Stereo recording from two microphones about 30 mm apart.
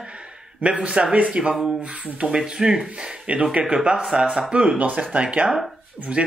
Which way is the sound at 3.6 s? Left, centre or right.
Right.